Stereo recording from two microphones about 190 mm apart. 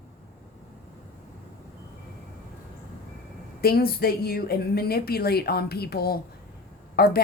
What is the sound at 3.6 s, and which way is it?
A woman's voice, 55° left (ahead or behind).